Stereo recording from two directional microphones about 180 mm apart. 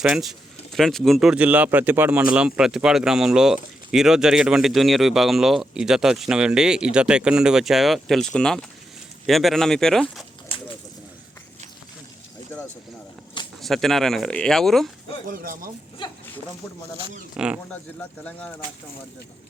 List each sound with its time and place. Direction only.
0.0 s speech: 5° right (ahead or behind)
13.6 s speech: centre (ahead or behind)
15.3 s speech: 50° right (ahead or behind)
16.0 s speech: 25° left (ahead or behind)
17.3 s speech: 5° right (ahead or behind)
18.2 s speech: 5° left (ahead or behind)